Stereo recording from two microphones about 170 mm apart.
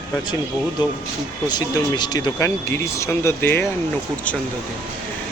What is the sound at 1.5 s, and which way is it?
Speech, 25° left (ahead or behind).